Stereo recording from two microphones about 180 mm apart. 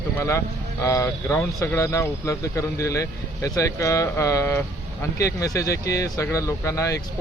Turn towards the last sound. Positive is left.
turn(degrees=15)  # may be behind; listen again after turning